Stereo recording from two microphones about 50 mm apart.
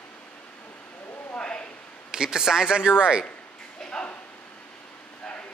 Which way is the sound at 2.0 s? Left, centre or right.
Centre.